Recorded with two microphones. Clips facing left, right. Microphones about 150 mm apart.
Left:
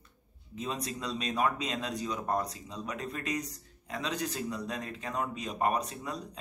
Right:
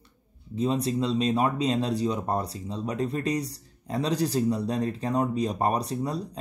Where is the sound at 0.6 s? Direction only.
30° right (ahead or behind).